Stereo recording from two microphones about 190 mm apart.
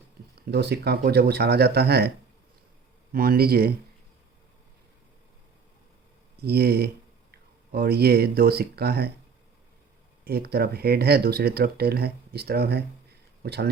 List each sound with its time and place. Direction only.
0.4 s speech: 60° right (ahead or behind)
6.4 s speech: 55° right (ahead or behind)
10.2 s speech: 55° right (ahead or behind)